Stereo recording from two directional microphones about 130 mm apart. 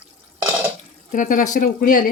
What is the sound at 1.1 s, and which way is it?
Speech, 90° left.